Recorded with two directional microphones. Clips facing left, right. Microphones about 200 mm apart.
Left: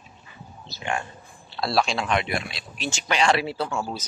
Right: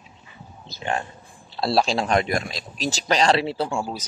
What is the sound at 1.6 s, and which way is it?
Speech, 30° right (ahead or behind).